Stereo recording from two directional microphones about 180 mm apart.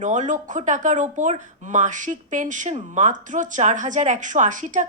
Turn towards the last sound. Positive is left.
turn(degrees=-45)  # may be behind; listen again after turning